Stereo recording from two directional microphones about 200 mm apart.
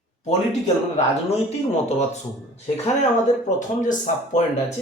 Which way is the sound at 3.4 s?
40° left (ahead or behind).